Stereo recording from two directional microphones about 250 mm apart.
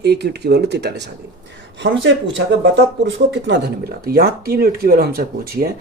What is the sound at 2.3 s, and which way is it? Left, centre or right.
Speech, right.